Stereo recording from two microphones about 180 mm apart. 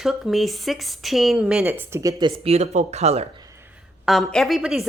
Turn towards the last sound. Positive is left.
turn(degrees=-5)  # may be behind; listen again after turning